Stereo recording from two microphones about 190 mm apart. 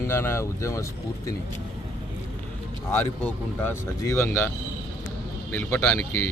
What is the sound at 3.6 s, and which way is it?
Speech, 15° left (ahead or behind).